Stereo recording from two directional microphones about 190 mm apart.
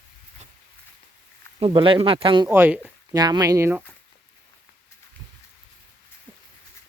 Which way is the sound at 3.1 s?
20° right (ahead or behind).